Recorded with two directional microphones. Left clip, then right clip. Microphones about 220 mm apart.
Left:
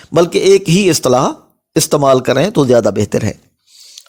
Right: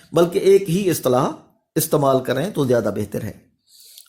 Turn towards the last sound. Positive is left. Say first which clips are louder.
# left 9 dB
turn(degrees=35)  # may be behind; listen again after turning